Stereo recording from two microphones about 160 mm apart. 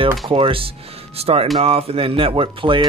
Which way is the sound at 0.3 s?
35° right (ahead or behind).